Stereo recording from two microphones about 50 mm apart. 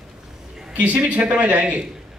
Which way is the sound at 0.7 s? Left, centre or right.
Right.